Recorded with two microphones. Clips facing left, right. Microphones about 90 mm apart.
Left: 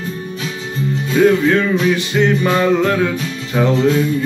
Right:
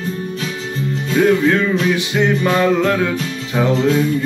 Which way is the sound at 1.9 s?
5° right (ahead or behind).